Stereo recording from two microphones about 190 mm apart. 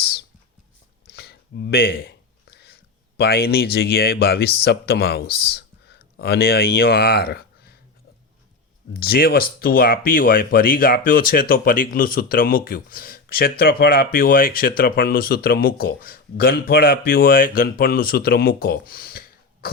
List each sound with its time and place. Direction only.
1.1 s speech: 60° left (ahead or behind)
8.9 s speech: 55° left (ahead or behind)